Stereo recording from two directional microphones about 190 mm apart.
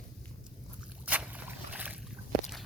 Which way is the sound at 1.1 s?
10° right (ahead or behind).